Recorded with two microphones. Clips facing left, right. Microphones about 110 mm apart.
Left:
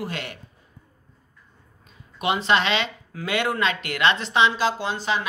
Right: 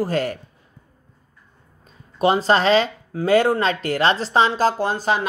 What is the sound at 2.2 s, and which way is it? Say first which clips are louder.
Speech: right 5 dB; 40° right (ahead or behind).